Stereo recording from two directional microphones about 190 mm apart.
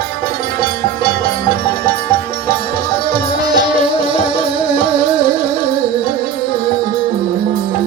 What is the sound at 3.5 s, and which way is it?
Music, 25° right (ahead or behind).